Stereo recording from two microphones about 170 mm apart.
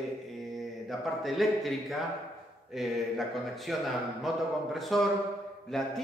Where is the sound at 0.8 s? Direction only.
Centre (ahead or behind).